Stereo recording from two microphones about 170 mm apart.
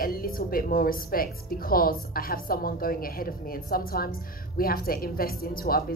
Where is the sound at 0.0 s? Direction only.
60° left (ahead or behind).